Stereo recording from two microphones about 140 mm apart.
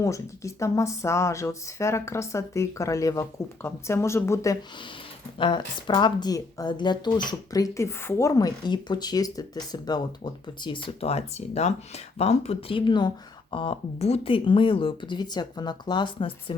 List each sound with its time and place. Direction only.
0.0 s speech: 20° left (ahead or behind)
5.4 s speech: 35° left (ahead or behind)